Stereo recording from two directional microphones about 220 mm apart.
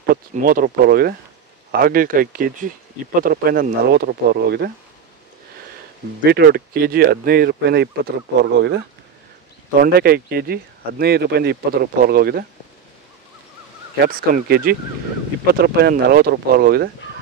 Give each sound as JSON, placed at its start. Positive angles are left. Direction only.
{"t": 0.1, "sound": "speech", "side_deg": -40}
{"t": 6.2, "sound": "speech", "side_deg": -45}
{"t": 14.0, "sound": "speech", "side_deg": -40}